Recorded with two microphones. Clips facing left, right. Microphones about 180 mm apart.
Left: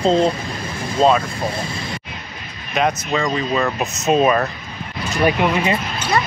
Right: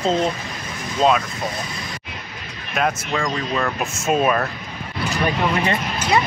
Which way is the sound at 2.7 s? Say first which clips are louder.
Left 3 dB; centre (ahead or behind).